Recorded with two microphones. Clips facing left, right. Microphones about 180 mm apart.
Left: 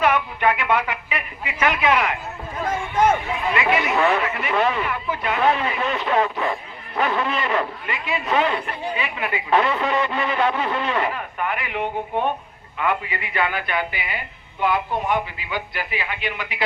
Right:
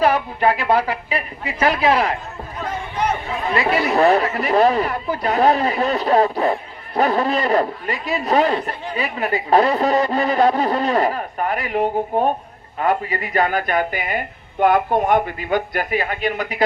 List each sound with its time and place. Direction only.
0.0 s speech: 35° right (ahead or behind)
2.6 s speech: 45° left (ahead or behind)
3.5 s a woman's voice: 35° right (ahead or behind)